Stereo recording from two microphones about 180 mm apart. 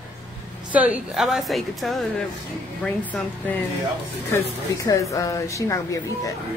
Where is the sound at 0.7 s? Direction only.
10° right (ahead or behind); by 6.0 s 15° left (ahead or behind).